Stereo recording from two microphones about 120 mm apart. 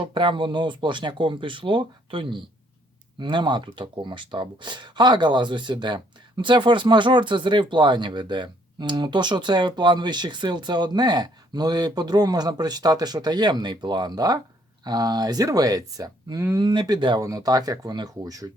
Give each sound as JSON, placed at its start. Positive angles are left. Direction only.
{"t": 0.0, "sound": "speech", "side_deg": -45}